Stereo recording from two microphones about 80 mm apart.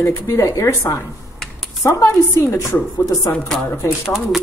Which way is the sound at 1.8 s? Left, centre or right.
Left.